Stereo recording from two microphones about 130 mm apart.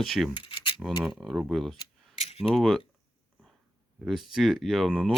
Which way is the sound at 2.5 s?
Centre (ahead or behind).